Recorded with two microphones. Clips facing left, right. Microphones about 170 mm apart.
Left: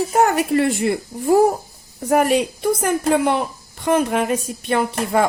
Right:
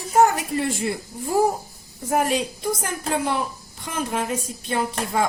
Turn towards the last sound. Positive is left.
turn(degrees=65)  # may be behind; listen again after turning